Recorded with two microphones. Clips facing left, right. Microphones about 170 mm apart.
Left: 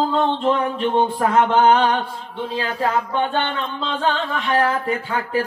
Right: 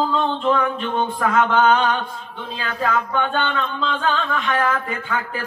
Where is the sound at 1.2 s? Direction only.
30° left (ahead or behind).